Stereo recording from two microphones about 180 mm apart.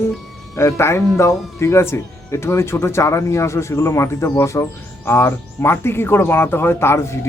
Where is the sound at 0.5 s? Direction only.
15° left (ahead or behind).